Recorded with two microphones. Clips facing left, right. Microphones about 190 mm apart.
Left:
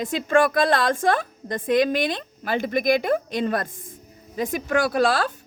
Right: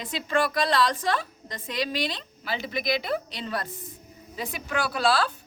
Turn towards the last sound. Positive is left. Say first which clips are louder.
# left 4 dB
turn(degrees=50)  # may be behind; listen again after turning